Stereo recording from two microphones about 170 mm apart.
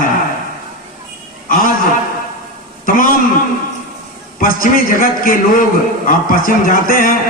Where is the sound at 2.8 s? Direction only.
55° left (ahead or behind).